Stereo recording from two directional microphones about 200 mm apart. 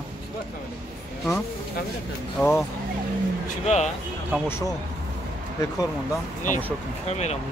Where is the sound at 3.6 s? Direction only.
35° left (ahead or behind).